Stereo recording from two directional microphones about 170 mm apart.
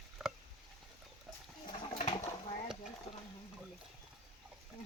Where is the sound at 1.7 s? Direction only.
25° left (ahead or behind).